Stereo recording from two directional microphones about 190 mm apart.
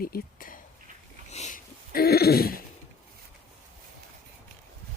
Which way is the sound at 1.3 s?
40° left (ahead or behind).